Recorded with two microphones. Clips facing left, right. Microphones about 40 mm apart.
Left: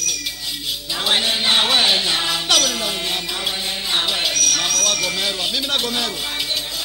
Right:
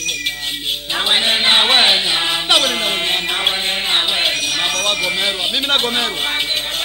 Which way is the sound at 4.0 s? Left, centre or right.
Right.